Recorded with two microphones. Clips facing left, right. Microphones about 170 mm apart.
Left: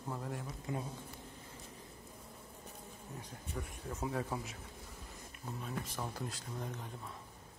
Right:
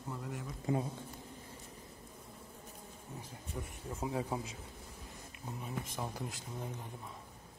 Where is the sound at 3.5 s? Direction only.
10° right (ahead or behind).